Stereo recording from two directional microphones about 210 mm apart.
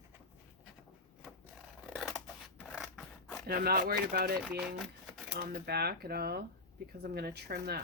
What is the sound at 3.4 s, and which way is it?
Speech, 45° right (ahead or behind).